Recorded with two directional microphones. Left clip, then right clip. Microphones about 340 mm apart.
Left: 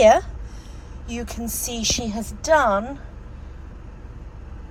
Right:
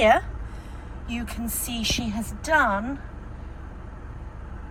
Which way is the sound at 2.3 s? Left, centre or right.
Centre.